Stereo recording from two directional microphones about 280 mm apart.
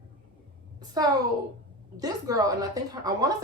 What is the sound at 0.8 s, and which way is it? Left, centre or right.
A woman's voice, centre.